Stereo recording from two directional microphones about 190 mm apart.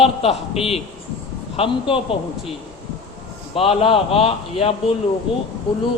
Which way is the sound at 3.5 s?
30° left (ahead or behind).